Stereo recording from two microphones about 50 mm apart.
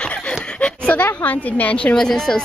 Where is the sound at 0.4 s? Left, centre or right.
Centre.